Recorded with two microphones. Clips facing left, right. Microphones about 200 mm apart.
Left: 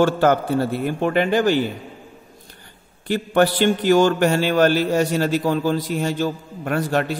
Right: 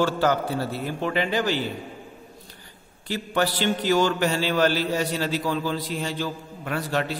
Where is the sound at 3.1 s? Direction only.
55° left (ahead or behind).